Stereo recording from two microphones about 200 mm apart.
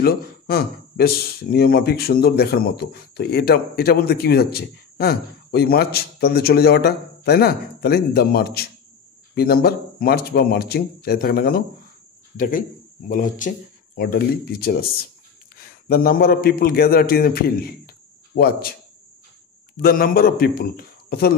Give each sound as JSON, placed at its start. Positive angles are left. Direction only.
{"t": 0.0, "sound": "a man's voice", "side_deg": 50}
{"t": 19.8, "sound": "speech", "side_deg": 45}